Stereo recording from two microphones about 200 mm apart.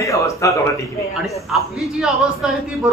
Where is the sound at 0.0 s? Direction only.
15° left (ahead or behind).